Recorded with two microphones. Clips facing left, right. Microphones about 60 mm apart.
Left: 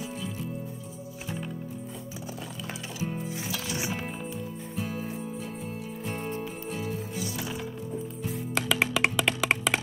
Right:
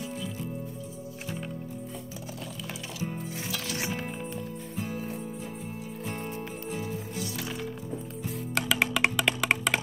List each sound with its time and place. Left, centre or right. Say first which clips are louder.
3.0 s music: left 2 dB; centre
6.7 s music: even; left
7.2 s music: left 1 dB; centre